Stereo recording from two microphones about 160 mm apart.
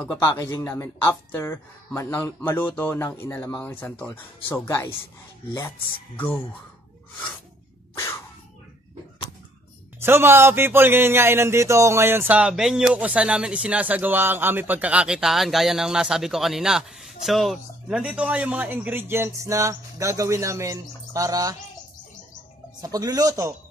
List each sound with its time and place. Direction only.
0.1 s speech: 20° left (ahead or behind)
6.1 s speech: 15° left (ahead or behind)
9.9 s a man's voice: 15° right (ahead or behind)
22.8 s speech: 25° right (ahead or behind)